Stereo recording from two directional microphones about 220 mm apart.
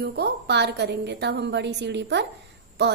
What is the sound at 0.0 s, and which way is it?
A woman's voice, 50° right (ahead or behind).